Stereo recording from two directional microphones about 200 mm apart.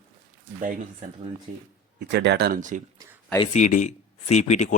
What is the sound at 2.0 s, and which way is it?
Speech, 60° right (ahead or behind).